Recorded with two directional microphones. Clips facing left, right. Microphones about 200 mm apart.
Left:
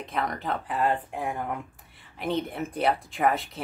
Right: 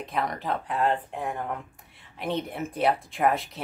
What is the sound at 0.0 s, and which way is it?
Speech, centre (ahead or behind).